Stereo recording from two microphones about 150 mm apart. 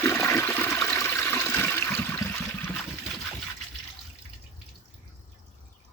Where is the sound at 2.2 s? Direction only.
15° left (ahead or behind).